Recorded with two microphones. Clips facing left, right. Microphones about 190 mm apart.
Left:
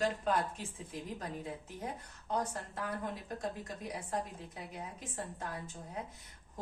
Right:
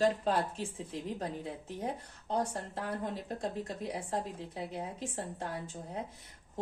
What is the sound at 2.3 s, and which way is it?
Speech, 30° right (ahead or behind).